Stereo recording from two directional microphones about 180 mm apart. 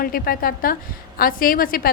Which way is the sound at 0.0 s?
55° left (ahead or behind).